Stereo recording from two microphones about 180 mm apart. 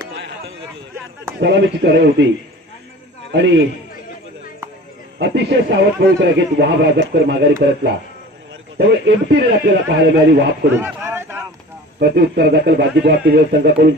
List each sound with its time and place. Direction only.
1.4 s a man's voice: 70° right (ahead or behind)
3.3 s a man's voice: 75° right (ahead or behind)
5.2 s a man's voice: 70° right (ahead or behind)
10.8 s a sound: 15° right (ahead or behind)
12.0 s speech: 65° right (ahead or behind)